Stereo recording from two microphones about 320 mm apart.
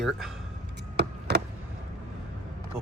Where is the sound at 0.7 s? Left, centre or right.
Right.